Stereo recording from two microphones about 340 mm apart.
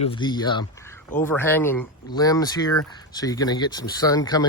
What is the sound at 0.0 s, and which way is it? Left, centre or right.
Speech, centre.